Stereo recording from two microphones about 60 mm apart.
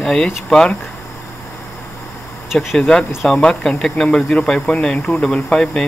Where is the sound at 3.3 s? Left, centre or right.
Centre.